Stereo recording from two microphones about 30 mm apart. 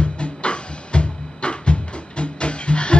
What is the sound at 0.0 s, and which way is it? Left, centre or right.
Music, left.